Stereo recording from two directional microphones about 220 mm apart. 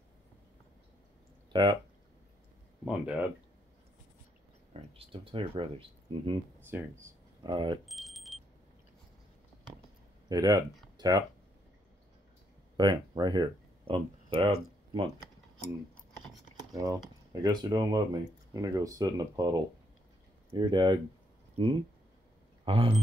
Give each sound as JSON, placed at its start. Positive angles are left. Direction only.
{"t": 1.5, "sound": "speech", "side_deg": -20}
{"t": 2.8, "sound": "speech", "side_deg": -5}
{"t": 4.7, "sound": "speech", "side_deg": -25}
{"t": 7.8, "sound": "a sound", "side_deg": 0}
{"t": 10.2, "sound": "speech", "side_deg": -20}
{"t": 12.7, "sound": "speech", "side_deg": -20}
{"t": 16.7, "sound": "speech", "side_deg": -15}
{"t": 22.7, "sound": "speech", "side_deg": -25}